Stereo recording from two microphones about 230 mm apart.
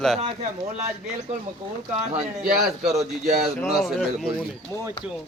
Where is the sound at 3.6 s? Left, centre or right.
Centre.